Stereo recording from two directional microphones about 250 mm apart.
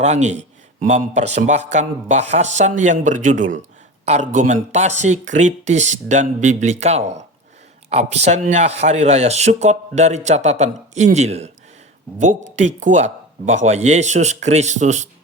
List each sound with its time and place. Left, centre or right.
0.0 s speech: right